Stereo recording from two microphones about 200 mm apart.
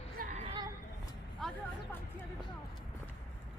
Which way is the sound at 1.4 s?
Centre (ahead or behind).